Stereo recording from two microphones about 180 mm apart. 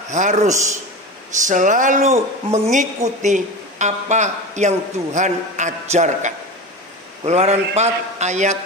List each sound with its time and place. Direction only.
0.1 s a man's voice: 40° right (ahead or behind)
1.4 s a sound: 45° right (ahead or behind)
2.5 s a man's voice: 40° right (ahead or behind)